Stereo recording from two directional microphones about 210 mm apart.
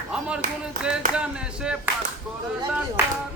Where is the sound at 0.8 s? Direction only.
5° right (ahead or behind).